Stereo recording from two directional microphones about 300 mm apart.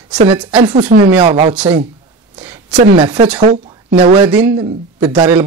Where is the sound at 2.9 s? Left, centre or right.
Centre.